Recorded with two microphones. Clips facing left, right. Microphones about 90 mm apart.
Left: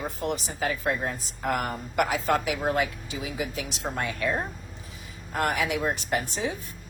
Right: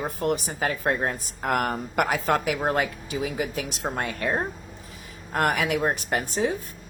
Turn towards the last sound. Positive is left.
turn(degrees=-50)  # may be behind; listen again after turning